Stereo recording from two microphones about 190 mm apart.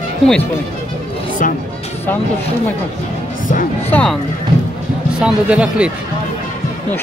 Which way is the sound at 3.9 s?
5° left (ahead or behind).